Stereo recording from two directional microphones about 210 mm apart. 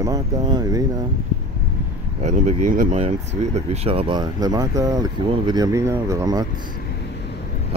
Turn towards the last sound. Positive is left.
turn(degrees=-15)  # may be behind; listen again after turning